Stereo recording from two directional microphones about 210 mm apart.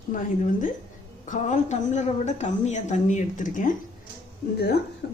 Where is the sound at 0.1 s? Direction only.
40° left (ahead or behind).